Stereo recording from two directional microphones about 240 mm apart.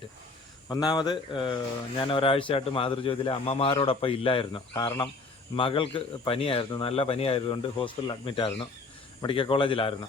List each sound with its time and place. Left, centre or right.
0.7 s a man's voice: centre